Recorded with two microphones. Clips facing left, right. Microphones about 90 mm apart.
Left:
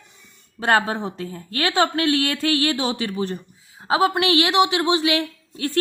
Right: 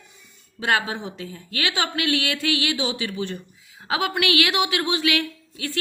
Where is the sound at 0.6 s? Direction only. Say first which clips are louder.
Left 4 dB; 40° left (ahead or behind).